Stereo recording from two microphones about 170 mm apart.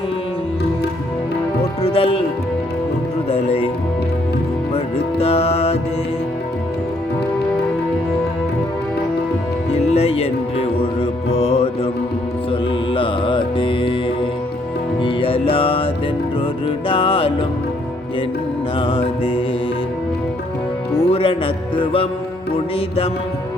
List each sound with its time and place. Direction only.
1.8 s music: 35° left (ahead or behind)
3.2 s music: 35° left (ahead or behind)
5.2 s music: 35° left (ahead or behind)
9.7 s music: 35° left (ahead or behind)
18.8 s music: 35° left (ahead or behind)
21.0 s music: 35° left (ahead or behind)